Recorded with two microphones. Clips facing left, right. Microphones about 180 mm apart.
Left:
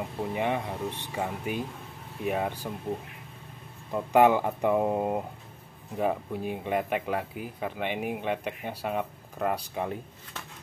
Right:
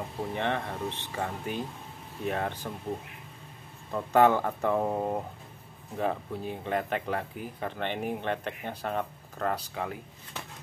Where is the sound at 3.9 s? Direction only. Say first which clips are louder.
Left 1 dB; 15° left (ahead or behind).